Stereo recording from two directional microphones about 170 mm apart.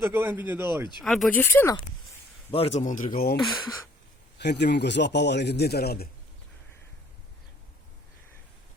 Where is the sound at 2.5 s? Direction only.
35° left (ahead or behind).